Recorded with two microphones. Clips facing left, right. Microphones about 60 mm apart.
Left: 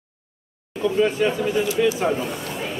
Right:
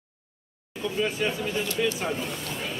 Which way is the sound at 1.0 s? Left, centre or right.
Centre.